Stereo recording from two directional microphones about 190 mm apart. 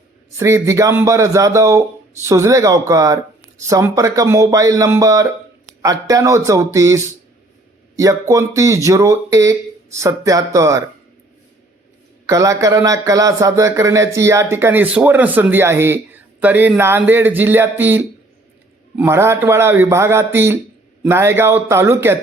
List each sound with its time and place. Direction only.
0.3 s speech: 15° right (ahead or behind)
8.3 s speech: 15° right (ahead or behind)
12.2 s speech: 15° right (ahead or behind)